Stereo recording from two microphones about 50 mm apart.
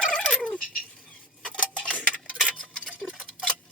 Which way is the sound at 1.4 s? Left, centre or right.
Left.